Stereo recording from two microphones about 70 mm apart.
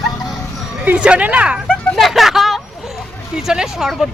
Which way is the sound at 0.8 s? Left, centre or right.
Centre.